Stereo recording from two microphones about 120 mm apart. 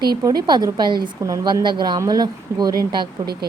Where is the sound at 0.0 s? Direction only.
35° right (ahead or behind).